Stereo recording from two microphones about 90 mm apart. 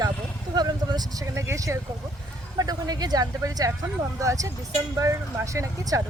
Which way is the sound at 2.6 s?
45° right (ahead or behind).